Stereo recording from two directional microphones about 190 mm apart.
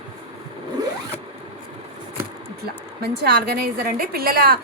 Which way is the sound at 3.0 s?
55° right (ahead or behind).